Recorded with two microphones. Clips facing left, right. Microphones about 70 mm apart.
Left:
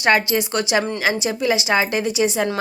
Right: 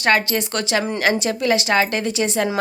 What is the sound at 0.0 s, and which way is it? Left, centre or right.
Speech, centre.